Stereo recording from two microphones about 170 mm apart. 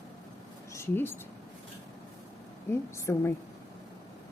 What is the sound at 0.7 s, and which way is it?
Speech, 15° left (ahead or behind).